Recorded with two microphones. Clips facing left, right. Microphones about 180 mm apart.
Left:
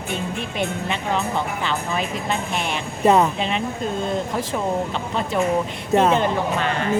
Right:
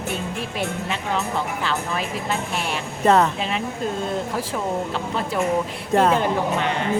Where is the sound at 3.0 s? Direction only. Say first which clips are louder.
Left 1 dB; 10° left (ahead or behind).